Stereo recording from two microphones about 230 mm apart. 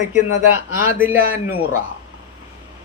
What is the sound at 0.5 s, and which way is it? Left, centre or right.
Speech, right.